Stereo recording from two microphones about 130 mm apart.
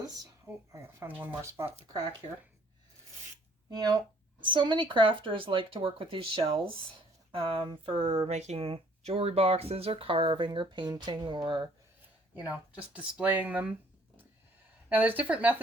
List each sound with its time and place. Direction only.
0.4 s speech: 20° right (ahead or behind)
3.7 s speech: 30° right (ahead or behind)
12.4 s speech: 10° right (ahead or behind)
14.8 s speech: 15° right (ahead or behind)